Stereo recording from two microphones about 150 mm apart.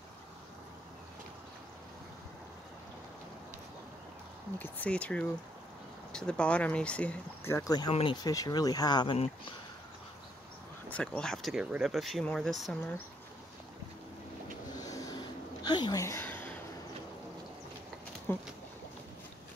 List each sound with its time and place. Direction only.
4.6 s speech: 10° left (ahead or behind)
7.5 s speech: 25° left (ahead or behind)
7.9 s speech: 40° left (ahead or behind)
8.2 s speech: 25° left (ahead or behind)
10.9 s speech: 5° left (ahead or behind)
14.8 s a sound: 25° left (ahead or behind)
18.3 s a sound: 15° left (ahead or behind)